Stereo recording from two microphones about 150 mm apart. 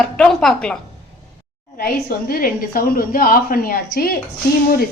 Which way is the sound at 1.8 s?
90° left.